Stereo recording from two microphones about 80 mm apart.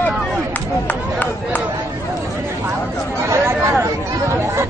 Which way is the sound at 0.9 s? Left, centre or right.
Centre.